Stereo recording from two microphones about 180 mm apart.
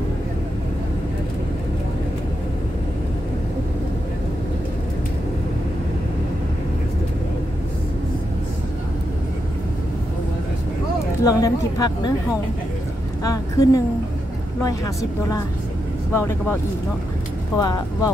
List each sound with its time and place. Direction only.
11.2 s speech: 20° left (ahead or behind)
13.2 s a woman's voice: 20° left (ahead or behind)
17.6 s speech: 20° left (ahead or behind)